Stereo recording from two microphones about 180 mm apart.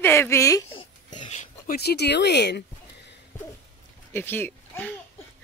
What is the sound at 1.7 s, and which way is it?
Speech, 65° left (ahead or behind).